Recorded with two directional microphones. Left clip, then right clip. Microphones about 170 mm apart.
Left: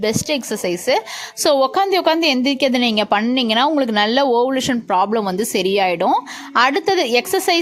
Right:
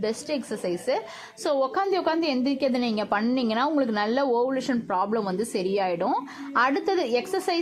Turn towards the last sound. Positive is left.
turn(degrees=30)  # may be behind; listen again after turning